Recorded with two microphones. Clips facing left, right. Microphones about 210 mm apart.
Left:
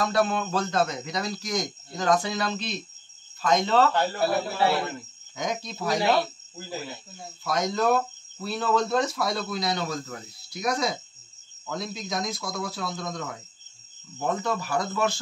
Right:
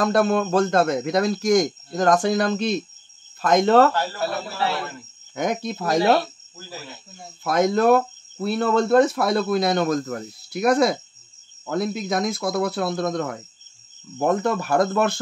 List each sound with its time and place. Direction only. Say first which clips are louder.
0.0 s speech: right 6 dB; 50° right (ahead or behind)
3.9 s a man's voice: left 1 dB; 20° left (ahead or behind)
5.3 s speech: right 7 dB; 60° right (ahead or behind)
7.4 s speech: right 7 dB; 55° right (ahead or behind)